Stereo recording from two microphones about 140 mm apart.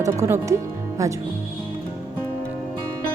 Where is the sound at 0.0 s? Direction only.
25° right (ahead or behind).